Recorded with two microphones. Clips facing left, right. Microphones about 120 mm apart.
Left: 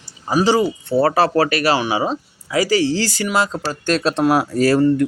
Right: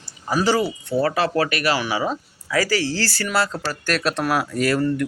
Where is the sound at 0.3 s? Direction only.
20° left (ahead or behind).